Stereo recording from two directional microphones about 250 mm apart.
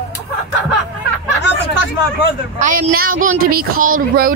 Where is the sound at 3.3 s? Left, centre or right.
Right.